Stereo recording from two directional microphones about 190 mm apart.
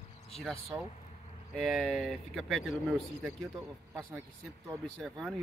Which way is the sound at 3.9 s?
10° right (ahead or behind).